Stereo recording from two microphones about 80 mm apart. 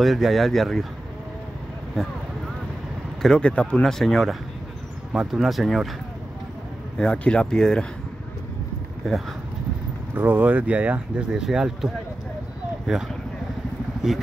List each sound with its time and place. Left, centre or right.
0.0 s speech: centre
2.0 s speech: centre
3.2 s speech: centre
5.1 s speech: centre
7.0 s speech: centre
10.1 s speech: right; by 14.2 s centre